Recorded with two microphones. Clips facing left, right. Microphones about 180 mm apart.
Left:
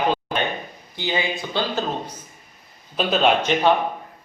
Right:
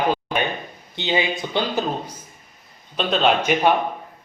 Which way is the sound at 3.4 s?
10° right (ahead or behind).